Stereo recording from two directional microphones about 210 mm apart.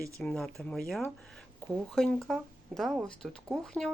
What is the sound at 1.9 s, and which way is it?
Speech, centre (ahead or behind).